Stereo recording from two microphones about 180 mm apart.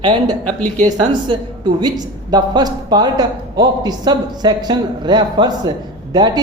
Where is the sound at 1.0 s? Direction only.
25° right (ahead or behind).